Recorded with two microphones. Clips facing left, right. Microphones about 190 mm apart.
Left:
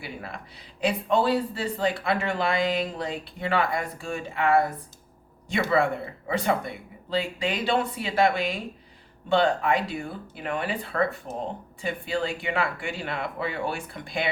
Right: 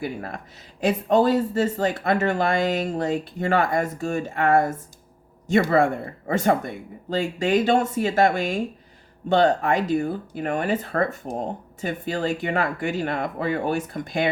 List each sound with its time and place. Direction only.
0.0 s speech: 45° right (ahead or behind)